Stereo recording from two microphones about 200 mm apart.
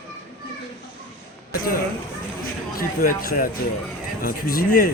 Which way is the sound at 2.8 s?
45° left (ahead or behind).